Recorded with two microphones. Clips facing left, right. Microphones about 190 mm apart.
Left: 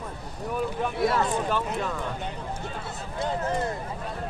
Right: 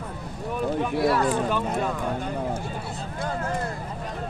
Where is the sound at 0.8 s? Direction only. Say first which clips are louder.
Right 2 dB; centre (ahead or behind).